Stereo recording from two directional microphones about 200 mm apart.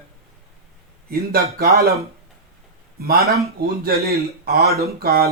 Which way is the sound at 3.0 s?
50° right (ahead or behind).